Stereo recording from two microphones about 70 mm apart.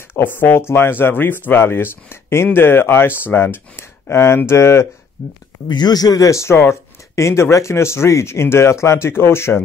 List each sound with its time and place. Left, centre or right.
0.1 s speech: left
5.7 s speech: left